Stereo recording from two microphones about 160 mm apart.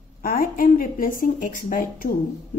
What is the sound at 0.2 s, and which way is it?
A woman's voice, 65° left (ahead or behind).